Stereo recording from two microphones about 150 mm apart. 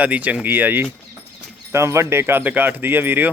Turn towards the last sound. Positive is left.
turn(degrees=-10)  # may be behind; listen again after turning